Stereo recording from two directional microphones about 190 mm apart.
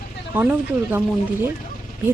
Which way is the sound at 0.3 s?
10° right (ahead or behind).